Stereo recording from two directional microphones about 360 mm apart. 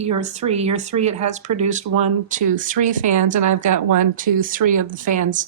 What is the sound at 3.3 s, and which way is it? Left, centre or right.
Speech, right.